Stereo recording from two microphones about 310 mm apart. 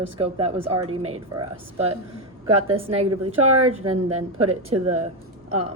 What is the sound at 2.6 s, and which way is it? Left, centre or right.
Speech, centre.